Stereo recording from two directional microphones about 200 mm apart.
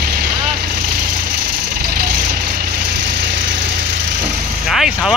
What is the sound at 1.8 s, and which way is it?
Vehicle, 50° right (ahead or behind).